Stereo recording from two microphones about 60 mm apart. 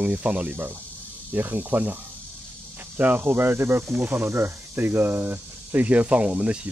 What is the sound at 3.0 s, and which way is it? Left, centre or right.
Speech, right.